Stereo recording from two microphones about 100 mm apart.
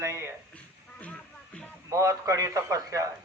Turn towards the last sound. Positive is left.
turn(degrees=-30)  # may be behind; listen again after turning